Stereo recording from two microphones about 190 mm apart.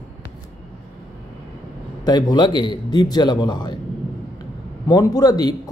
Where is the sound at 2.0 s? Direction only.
20° left (ahead or behind).